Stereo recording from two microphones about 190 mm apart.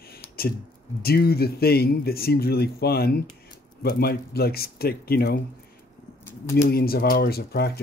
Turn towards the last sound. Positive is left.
turn(degrees=55)  # may be behind; listen again after turning